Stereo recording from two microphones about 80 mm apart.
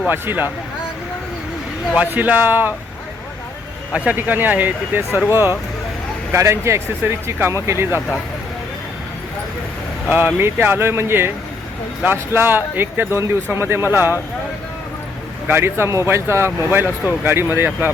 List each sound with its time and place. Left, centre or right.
0.1 s speech: right
2.0 s speech: centre
3.9 s speech: right
10.1 s speech: right
15.4 s speech: right